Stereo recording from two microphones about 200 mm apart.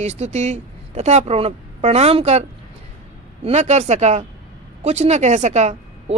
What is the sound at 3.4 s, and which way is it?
Speech, 35° right (ahead or behind).